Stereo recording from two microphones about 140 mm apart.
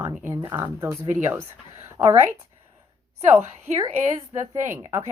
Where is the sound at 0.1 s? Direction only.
5° right (ahead or behind).